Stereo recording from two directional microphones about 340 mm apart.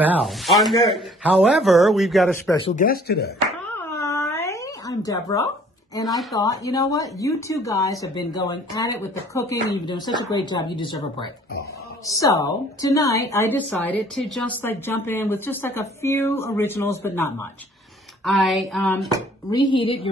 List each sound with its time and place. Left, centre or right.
0.0 s speech: centre
2.6 s speech: left
3.6 s cat: centre
5.9 s a woman's voice: centre
19.5 s a woman's voice: centre